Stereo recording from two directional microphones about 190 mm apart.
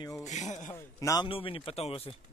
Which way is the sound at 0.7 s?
15° left (ahead or behind).